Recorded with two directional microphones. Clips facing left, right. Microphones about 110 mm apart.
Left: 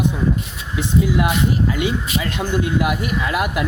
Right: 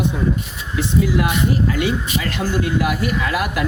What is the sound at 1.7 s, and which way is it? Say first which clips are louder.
Speech: right 1 dB; 20° left (ahead or behind).